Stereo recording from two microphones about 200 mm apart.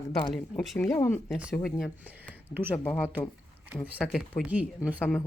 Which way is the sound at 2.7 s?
5° left (ahead or behind).